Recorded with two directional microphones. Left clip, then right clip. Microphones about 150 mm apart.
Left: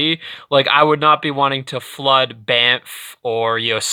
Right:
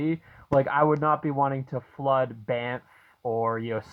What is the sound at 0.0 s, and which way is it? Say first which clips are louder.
Speech: left 11 dB; 35° left (ahead or behind).